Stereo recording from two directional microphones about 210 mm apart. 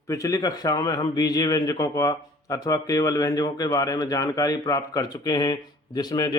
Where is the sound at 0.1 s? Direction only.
15° left (ahead or behind).